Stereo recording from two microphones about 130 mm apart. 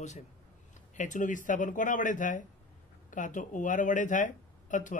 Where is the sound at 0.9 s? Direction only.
80° left.